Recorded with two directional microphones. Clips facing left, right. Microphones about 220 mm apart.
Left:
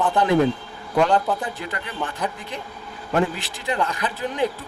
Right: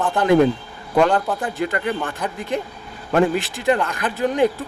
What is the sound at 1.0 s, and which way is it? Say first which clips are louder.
Speech: right 1 dB; centre (ahead or behind).